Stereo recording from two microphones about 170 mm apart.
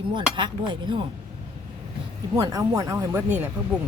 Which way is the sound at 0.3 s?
25° right (ahead or behind).